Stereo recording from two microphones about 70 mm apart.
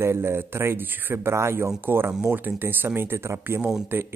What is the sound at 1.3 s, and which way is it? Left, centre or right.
Speech, right.